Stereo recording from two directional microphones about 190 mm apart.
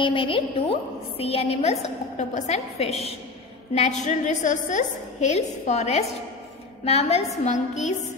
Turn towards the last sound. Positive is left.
turn(degrees=40)  # may be behind; listen again after turning